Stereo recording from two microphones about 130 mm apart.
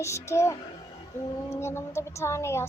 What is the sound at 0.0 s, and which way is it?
Speech, 20° left (ahead or behind).